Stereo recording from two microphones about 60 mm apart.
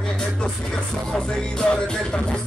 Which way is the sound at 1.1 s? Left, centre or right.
Centre.